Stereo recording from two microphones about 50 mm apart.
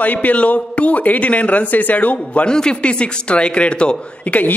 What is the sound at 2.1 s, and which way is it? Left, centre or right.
Speech, left.